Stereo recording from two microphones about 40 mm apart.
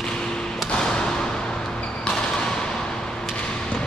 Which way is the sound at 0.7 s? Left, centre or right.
Centre.